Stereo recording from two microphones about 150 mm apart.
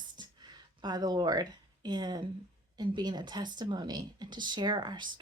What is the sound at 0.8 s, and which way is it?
A woman's voice, 25° right (ahead or behind).